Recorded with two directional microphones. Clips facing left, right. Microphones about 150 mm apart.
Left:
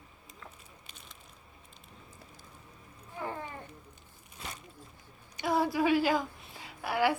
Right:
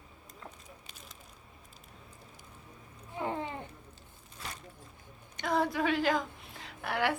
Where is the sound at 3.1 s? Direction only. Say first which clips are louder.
Right 4 dB; 20° right (ahead or behind).